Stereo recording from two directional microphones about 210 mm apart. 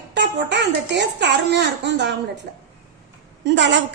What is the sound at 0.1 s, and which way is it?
A woman's voice, 55° right (ahead or behind).